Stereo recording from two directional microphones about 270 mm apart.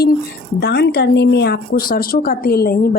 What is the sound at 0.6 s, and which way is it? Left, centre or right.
Speech, left.